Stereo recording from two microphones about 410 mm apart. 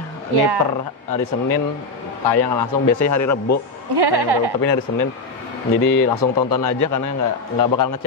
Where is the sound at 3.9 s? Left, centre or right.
Right.